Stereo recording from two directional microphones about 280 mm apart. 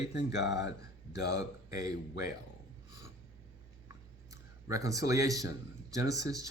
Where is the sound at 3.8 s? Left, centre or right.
Centre.